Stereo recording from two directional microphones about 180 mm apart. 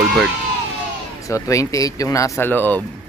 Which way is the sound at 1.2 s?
15° left (ahead or behind).